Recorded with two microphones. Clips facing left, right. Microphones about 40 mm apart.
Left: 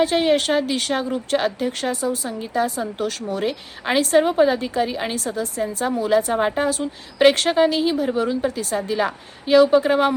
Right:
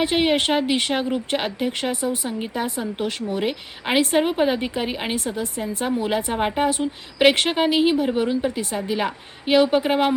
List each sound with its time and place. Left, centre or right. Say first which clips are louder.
0.0 s a woman's voice: left 2 dB; right